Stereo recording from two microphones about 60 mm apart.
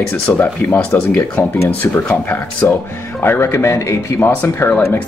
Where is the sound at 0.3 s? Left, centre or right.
Left.